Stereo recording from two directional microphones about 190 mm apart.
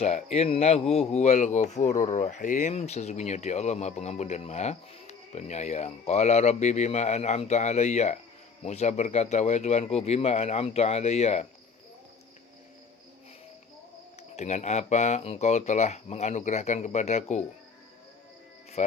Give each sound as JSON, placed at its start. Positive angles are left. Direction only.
{"t": 0.0, "sound": "speech", "side_deg": 35}
{"t": 14.2, "sound": "speech", "side_deg": 35}